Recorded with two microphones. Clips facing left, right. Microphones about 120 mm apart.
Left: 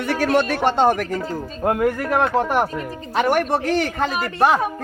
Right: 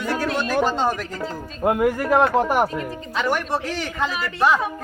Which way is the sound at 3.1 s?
55° left (ahead or behind).